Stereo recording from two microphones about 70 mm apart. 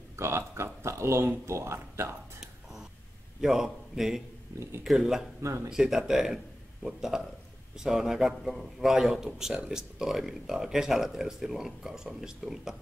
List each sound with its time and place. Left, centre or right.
0.1 s speech: right
0.8 s a sound: right
1.2 s speech: right
3.3 s a man's voice: centre
5.4 s speech: right
5.7 s a man's voice: centre